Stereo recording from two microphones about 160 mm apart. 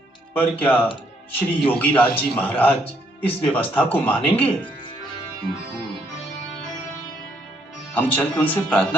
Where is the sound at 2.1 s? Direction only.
10° left (ahead or behind).